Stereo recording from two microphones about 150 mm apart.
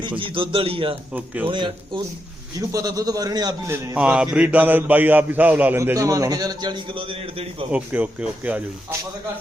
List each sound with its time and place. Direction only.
0.2 s a man's voice: 35° right (ahead or behind)
1.1 s speech: 10° right (ahead or behind)
1.5 s a man's voice: 30° right (ahead or behind)
3.9 s speech: 10° right (ahead or behind); by 7.7 s 35° right (ahead or behind)
7.7 s speech: 10° right (ahead or behind)